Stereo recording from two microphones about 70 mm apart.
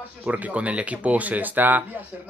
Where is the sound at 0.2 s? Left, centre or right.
Right.